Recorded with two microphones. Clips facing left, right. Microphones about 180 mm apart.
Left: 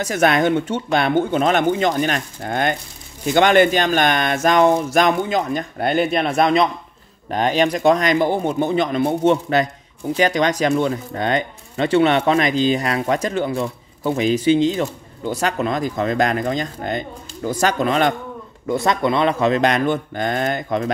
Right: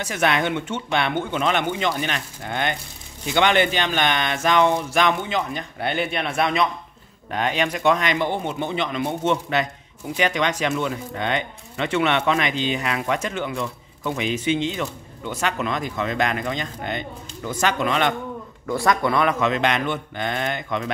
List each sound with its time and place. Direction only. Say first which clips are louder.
0.0 s speech: left 5 dB; 40° left (ahead or behind)
18.7 s speech: left 2 dB; 20° left (ahead or behind); by 20.9 s 40° left (ahead or behind)